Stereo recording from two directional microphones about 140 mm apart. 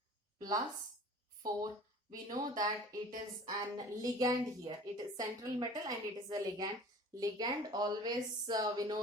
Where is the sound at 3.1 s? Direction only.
25° right (ahead or behind).